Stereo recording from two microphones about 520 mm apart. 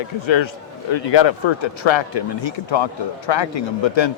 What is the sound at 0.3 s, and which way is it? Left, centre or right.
A man's voice, left.